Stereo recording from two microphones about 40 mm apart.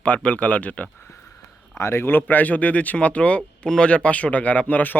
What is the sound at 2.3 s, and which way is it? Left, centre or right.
Speech, left.